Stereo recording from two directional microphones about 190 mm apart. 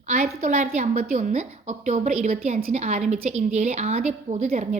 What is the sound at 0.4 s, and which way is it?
A woman's voice, 40° right (ahead or behind).